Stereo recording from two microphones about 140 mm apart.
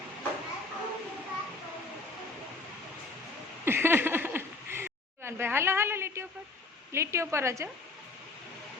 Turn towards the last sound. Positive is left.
turn(degrees=-20)  # may be behind; listen again after turning